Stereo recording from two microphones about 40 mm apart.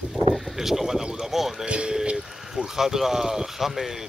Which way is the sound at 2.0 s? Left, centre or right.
Right.